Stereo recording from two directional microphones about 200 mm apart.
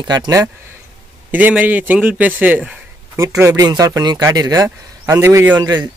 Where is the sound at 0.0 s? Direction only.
20° right (ahead or behind).